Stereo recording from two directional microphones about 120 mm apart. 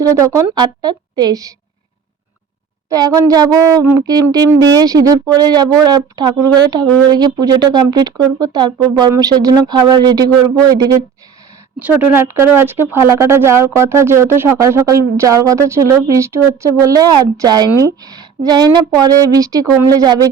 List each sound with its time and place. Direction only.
0.0 s speech: 25° right (ahead or behind)
2.9 s speech: 30° right (ahead or behind)
11.8 s speech: 15° right (ahead or behind); by 20.3 s 30° right (ahead or behind)